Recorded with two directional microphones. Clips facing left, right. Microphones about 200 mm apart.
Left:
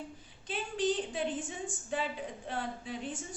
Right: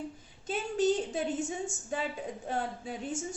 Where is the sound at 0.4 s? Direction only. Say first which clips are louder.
Right 4 dB; 45° right (ahead or behind).